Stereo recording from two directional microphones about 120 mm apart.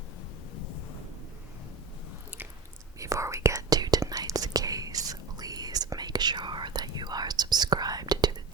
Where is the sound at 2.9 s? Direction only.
25° right (ahead or behind).